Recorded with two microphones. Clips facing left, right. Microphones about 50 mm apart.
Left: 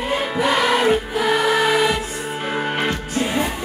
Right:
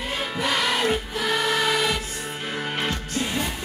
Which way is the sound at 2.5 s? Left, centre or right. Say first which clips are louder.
Left 6 dB; left.